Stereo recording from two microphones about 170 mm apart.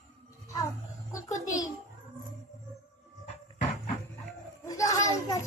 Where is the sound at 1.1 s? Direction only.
20° left (ahead or behind).